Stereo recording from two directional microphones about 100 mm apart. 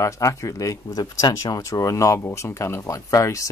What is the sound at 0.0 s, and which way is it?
Speech, 30° left (ahead or behind).